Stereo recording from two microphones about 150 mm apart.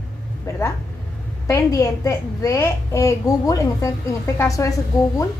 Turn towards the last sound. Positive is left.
turn(degrees=20)  # may be behind; listen again after turning